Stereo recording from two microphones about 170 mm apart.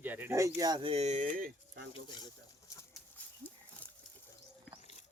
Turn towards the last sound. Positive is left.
turn(degrees=10)  # may be behind; listen again after turning